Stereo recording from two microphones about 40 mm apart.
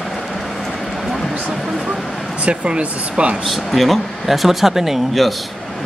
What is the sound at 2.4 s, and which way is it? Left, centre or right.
Speech, right.